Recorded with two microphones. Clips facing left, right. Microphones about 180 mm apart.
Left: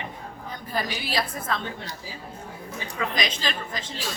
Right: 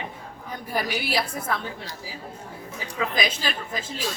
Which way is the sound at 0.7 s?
10° right (ahead or behind).